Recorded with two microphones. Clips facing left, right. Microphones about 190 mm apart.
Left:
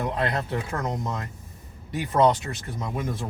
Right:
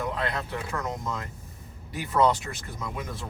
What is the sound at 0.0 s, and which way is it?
Speech, 40° left (ahead or behind).